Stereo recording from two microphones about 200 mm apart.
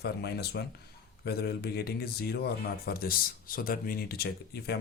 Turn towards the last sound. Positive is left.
turn(degrees=50)  # may be behind; listen again after turning